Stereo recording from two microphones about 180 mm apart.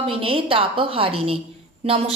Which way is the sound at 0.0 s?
30° right (ahead or behind).